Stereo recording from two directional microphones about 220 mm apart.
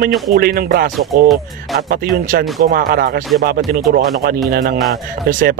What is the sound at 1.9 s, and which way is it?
Speech, 40° right (ahead or behind).